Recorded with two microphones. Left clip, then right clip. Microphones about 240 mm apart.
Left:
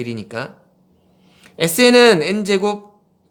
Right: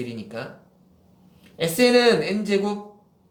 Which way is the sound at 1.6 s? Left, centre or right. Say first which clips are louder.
Left 7 dB; left.